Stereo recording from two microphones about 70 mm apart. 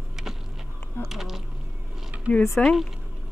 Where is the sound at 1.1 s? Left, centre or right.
Centre.